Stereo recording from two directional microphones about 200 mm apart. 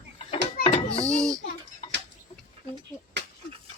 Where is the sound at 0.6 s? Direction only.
30° left (ahead or behind).